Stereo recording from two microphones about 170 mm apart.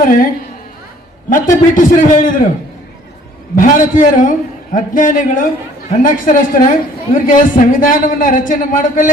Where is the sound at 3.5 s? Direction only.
50° left (ahead or behind).